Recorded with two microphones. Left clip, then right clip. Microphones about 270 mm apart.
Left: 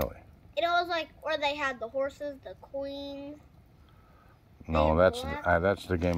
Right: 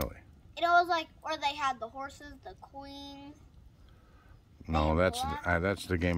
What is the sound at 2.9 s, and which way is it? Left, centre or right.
Speech, centre.